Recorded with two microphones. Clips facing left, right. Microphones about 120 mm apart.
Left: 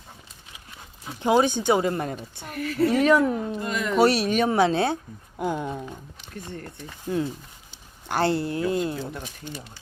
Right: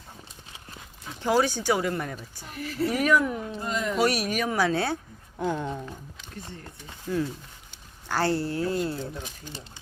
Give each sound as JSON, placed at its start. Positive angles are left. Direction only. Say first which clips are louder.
{"t": 1.2, "sound": "speech", "louder": "left 3 dB", "side_deg": 20}
{"t": 2.4, "sound": "a woman's voice", "louder": "left 5 dB", "side_deg": 65}
{"t": 2.9, "sound": "speech", "louder": "left 3 dB", "side_deg": 30}
{"t": 3.6, "sound": "speech", "louder": "left 1 dB", "side_deg": 70}
{"t": 3.9, "sound": "speech", "louder": "left 7 dB", "side_deg": 30}
{"t": 7.1, "sound": "speech", "louder": "left 2 dB", "side_deg": 25}